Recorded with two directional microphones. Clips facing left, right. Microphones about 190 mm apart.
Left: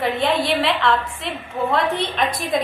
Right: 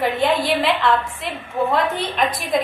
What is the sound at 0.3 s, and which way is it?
Speech, centre (ahead or behind).